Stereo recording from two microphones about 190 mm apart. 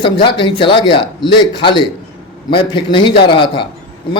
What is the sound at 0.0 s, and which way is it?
Speech, 25° left (ahead or behind).